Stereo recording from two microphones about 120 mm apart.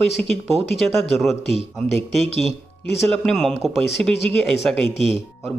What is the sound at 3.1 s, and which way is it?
Speech, 5° left (ahead or behind).